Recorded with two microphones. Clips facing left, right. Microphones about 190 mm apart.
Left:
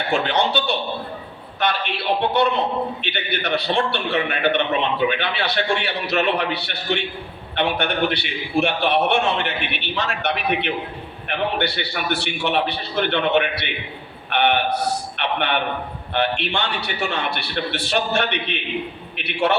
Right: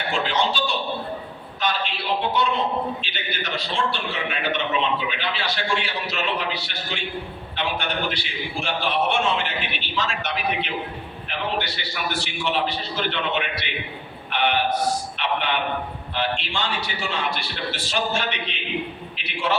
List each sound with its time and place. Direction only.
0.1 s a man's voice: 60° left (ahead or behind)